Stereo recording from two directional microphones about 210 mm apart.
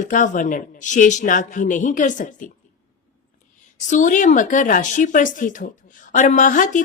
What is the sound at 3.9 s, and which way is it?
Speech, 35° left (ahead or behind).